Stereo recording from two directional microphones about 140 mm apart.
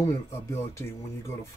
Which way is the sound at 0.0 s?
20° left (ahead or behind).